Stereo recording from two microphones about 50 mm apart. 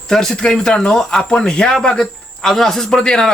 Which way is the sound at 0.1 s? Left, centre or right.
Centre.